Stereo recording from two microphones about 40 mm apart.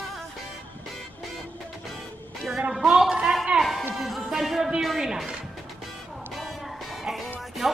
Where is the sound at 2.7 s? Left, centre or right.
Centre.